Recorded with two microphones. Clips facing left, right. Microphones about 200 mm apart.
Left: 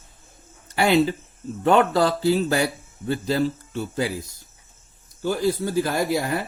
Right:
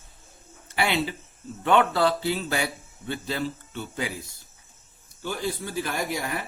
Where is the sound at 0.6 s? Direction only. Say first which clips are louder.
Left 7 dB; 45° left (ahead or behind).